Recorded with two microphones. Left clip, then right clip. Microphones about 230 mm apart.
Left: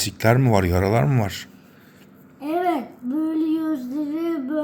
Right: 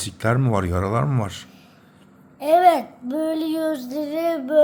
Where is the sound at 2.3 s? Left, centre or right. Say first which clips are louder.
Right 8 dB; centre.